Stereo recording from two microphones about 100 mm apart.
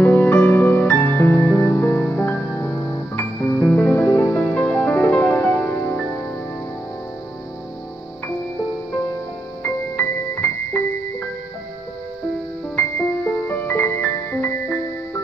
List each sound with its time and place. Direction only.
0.0 s music: 15° left (ahead or behind)
12.7 s music: 20° left (ahead or behind)